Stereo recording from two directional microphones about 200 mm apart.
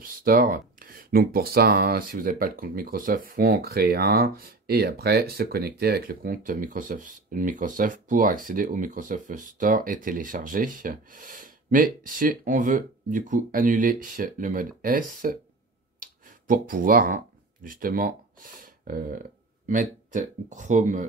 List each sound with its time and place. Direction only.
0.0 s speech: 45° right (ahead or behind)
16.0 s clicking: 45° right (ahead or behind)
17.6 s speech: 45° right (ahead or behind)